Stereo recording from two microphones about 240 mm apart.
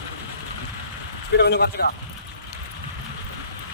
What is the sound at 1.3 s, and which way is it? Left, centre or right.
Speech, left.